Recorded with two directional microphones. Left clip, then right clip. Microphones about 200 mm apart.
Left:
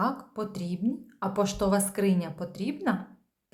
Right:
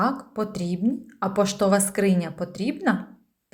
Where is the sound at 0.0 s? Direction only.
10° right (ahead or behind).